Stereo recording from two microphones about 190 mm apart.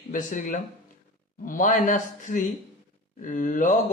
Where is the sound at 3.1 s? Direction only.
45° left (ahead or behind).